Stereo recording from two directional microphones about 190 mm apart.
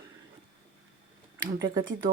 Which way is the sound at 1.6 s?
25° right (ahead or behind).